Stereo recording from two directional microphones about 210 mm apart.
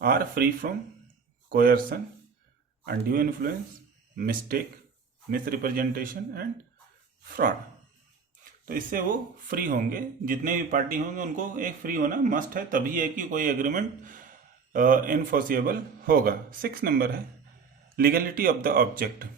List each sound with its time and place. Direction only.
0.0 s speech: 45° right (ahead or behind)
8.6 s speech: 40° right (ahead or behind)